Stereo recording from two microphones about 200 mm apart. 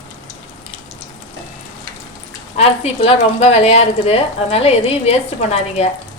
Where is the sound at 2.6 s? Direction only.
30° left (ahead or behind).